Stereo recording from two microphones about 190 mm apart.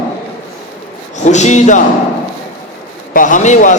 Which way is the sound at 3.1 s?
45° left (ahead or behind).